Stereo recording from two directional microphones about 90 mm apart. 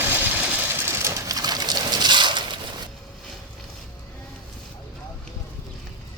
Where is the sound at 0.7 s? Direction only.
30° right (ahead or behind).